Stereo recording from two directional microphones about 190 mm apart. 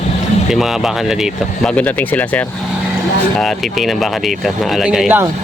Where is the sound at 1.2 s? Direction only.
5° left (ahead or behind).